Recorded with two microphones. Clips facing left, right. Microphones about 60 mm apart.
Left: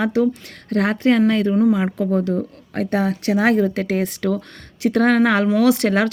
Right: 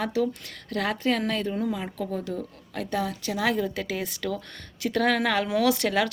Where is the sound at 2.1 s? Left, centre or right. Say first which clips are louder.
Left 11 dB; left.